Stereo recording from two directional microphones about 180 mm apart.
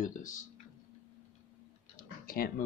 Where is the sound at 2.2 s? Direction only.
55° left (ahead or behind).